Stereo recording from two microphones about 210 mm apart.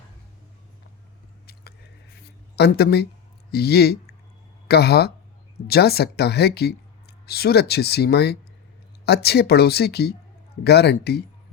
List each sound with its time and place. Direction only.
2.6 s speech: 50° left (ahead or behind)